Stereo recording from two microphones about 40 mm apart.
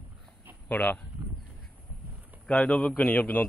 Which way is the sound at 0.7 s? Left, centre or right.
Left.